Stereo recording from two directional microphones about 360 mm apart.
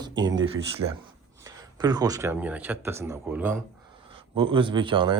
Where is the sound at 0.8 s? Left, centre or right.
Right.